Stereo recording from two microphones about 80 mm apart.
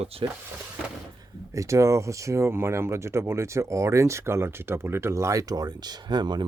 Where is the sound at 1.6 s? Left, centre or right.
Right.